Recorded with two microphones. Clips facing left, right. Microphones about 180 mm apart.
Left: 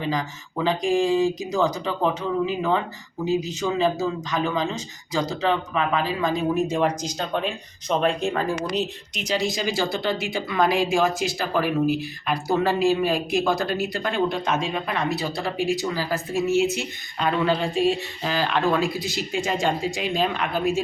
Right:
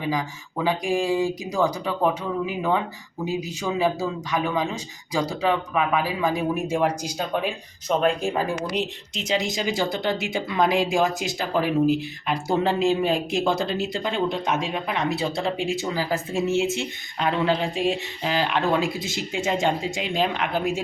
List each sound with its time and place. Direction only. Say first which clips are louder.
0.0 s speech: even; 10° right (ahead or behind)
9.1 s speech: even; 20° right (ahead or behind)